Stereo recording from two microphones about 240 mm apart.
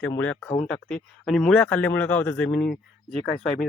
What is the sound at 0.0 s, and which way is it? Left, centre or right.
Speech, centre.